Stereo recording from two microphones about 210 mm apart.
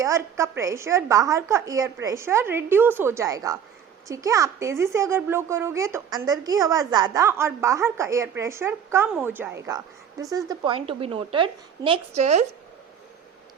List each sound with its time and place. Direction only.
0.0 s a woman's voice: 15° right (ahead or behind); by 12.5 s 30° right (ahead or behind)